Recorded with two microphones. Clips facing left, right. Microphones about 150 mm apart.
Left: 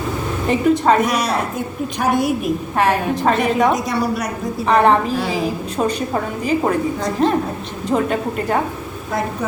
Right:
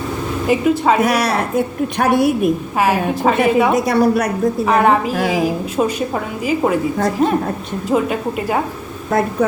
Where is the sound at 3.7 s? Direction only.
55° right (ahead or behind).